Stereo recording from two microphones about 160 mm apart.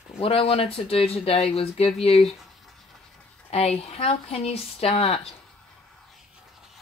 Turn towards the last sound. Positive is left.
turn(degrees=40)  # may be behind; listen again after turning